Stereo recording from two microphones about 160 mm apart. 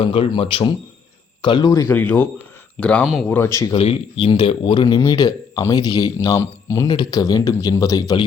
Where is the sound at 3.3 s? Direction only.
15° left (ahead or behind).